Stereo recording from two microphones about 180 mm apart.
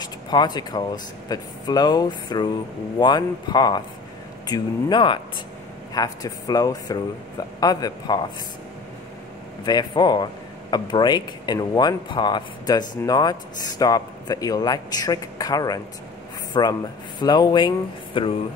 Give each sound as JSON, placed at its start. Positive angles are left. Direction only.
{"t": 0.0, "sound": "speech", "side_deg": 25}
{"t": 9.7, "sound": "speech", "side_deg": 25}